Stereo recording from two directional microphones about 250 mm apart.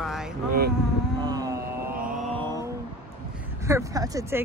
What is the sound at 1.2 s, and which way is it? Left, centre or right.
Vehicle, centre.